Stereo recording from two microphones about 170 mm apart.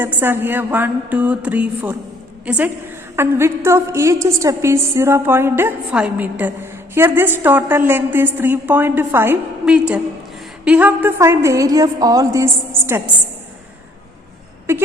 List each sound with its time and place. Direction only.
0.0 s a woman's voice: 10° right (ahead or behind)
3.2 s a woman's voice: 15° right (ahead or behind)
14.7 s a sound: 15° right (ahead or behind)